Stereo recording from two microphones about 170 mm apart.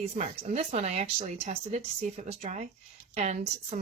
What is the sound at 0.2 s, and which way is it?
Speech, 40° right (ahead or behind).